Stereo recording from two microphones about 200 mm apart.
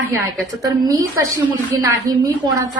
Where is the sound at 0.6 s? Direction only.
15° right (ahead or behind).